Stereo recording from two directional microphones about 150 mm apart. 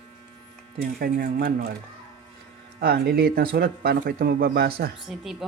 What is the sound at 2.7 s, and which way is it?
Speech, 90° right.